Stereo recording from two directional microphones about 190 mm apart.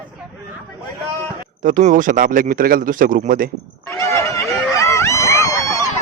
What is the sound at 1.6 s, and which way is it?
Speech, 45° right (ahead or behind).